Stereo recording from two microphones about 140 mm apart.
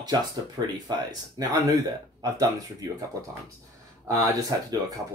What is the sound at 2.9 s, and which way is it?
Speech, 25° right (ahead or behind).